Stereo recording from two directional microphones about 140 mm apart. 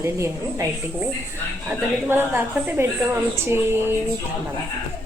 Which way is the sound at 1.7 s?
15° right (ahead or behind).